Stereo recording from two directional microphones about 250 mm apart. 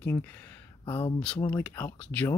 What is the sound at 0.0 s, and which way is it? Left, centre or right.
A man's voice, centre.